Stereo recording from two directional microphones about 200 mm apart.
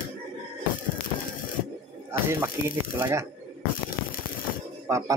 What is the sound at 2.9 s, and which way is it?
Speech, 15° right (ahead or behind).